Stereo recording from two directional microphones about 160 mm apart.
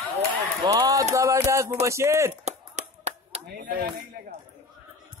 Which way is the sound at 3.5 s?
65° right (ahead or behind).